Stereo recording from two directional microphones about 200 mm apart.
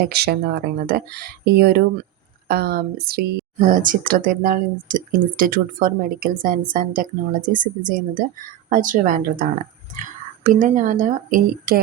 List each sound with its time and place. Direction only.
0.0 s a woman's voice: 50° right (ahead or behind)